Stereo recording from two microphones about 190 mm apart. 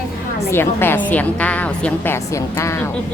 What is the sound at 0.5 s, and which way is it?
A woman's voice, 10° left (ahead or behind).